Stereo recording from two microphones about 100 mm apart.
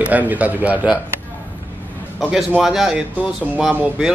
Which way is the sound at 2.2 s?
5° right (ahead or behind).